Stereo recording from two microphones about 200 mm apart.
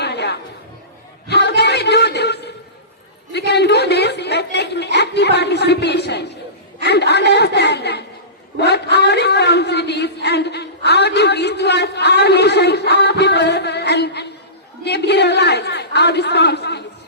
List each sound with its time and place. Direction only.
0.0 s chatter: 55° left (ahead or behind)
1.3 s a sound: 55° left (ahead or behind)
6.8 s a man's voice: 55° left (ahead or behind)